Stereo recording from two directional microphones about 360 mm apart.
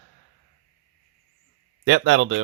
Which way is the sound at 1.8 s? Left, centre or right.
Right.